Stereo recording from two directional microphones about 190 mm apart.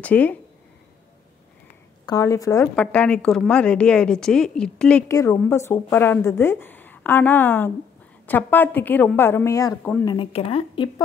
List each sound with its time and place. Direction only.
0.0 s a woman's voice: 10° left (ahead or behind)
2.0 s a woman's voice: 20° left (ahead or behind)
5.0 s a woman's voice: 15° left (ahead or behind)
10.0 s speech: 30° left (ahead or behind)